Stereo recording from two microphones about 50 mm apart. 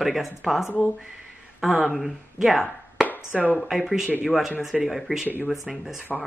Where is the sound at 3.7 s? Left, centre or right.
Centre.